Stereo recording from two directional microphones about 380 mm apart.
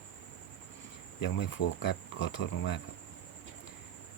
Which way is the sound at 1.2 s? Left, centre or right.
Left.